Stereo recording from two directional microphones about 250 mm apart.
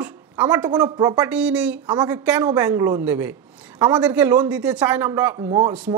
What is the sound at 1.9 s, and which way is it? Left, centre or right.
Speech, centre.